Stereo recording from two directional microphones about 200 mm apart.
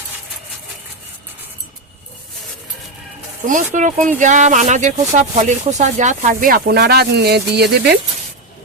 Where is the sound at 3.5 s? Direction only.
40° right (ahead or behind).